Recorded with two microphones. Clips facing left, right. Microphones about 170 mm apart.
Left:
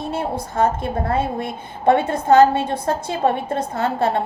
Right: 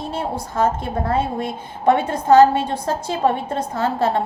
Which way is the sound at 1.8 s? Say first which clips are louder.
Left 1 dB; 55° left (ahead or behind).